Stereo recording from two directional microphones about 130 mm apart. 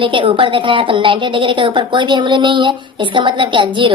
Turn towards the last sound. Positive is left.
turn(degrees=-40)  # may be behind; listen again after turning